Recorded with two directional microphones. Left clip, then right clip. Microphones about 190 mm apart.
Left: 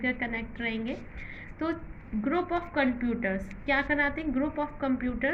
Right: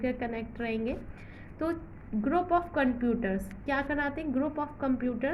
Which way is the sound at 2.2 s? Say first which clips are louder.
Right 2 dB; 35° right (ahead or behind).